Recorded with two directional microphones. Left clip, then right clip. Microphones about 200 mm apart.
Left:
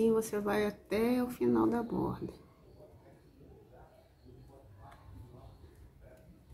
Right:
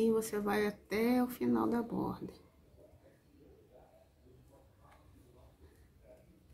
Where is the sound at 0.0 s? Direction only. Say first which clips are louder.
Left 2 dB; 25° right (ahead or behind).